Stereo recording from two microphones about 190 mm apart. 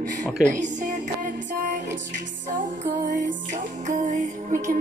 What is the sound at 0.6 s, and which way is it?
Music, 40° right (ahead or behind).